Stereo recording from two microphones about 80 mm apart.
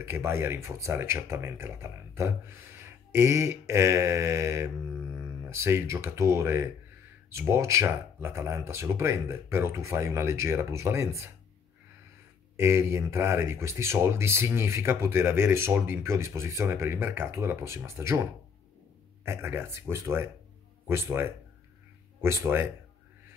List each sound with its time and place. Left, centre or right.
0.0 s speech: right
12.5 s speech: right
19.2 s speech: right